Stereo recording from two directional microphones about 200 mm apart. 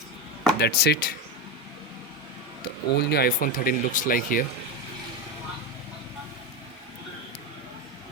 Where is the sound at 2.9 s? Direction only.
55° left (ahead or behind).